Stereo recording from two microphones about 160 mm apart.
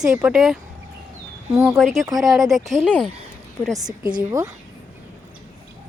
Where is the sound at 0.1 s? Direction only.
10° right (ahead or behind).